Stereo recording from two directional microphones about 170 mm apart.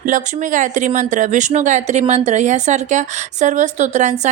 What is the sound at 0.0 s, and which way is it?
A woman's voice, 50° right (ahead or behind).